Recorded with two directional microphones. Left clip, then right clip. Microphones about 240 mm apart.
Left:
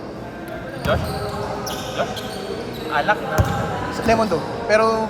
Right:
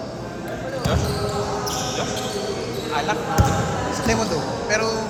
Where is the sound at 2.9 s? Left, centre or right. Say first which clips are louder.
Left 5 dB; left.